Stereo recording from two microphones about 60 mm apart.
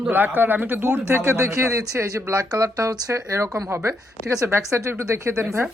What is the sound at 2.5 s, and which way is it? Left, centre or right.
Speech, right.